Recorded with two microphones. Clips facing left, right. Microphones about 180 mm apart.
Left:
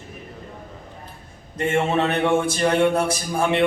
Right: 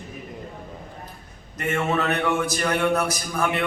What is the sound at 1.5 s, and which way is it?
A man's voice, 30° left (ahead or behind).